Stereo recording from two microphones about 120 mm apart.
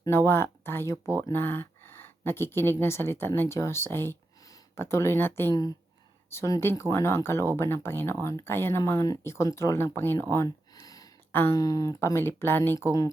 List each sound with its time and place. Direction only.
0.0 s speech: 20° left (ahead or behind)
10.3 s a sound: 30° left (ahead or behind)
11.3 s speech: 20° left (ahead or behind)
11.5 s speech: 30° left (ahead or behind)